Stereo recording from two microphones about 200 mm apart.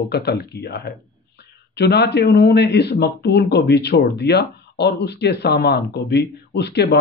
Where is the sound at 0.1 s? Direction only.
55° left (ahead or behind).